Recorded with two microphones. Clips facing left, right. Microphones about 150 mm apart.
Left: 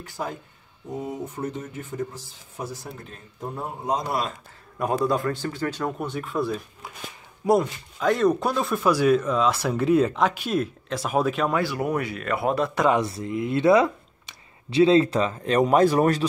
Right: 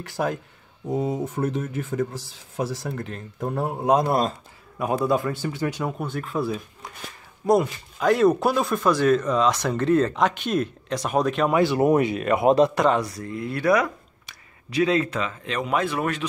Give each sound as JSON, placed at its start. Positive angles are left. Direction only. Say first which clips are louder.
{"t": 0.0, "sound": "speech", "louder": "right 6 dB", "side_deg": -80}
{"t": 4.1, "sound": "speech", "louder": "right 5 dB", "side_deg": -40}
{"t": 4.7, "sound": "a man's voice", "louder": "right 1 dB", "side_deg": -5}
{"t": 5.9, "sound": "speech", "louder": "even", "side_deg": 0}
{"t": 11.5, "sound": "speech", "louder": "right 6 dB", "side_deg": -25}
{"t": 12.9, "sound": "speech", "louder": "left 1 dB", "side_deg": 25}